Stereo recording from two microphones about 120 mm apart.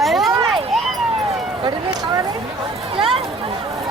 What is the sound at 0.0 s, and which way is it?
Run, centre (ahead or behind).